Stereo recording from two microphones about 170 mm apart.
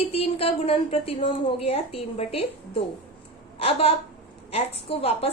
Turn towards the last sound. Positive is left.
turn(degrees=35)  # may be behind; listen again after turning